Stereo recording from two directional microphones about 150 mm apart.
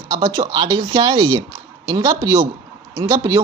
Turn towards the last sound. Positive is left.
turn(degrees=-25)  # may be behind; listen again after turning